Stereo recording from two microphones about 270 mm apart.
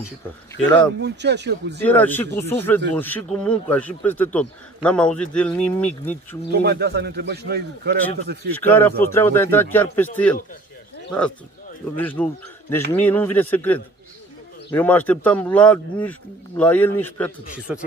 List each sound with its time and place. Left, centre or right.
1.0 s a man's voice: right
1.8 s a man's voice: centre
6.5 s a man's voice: right
8.6 s a man's voice: centre
17.6 s a man's voice: centre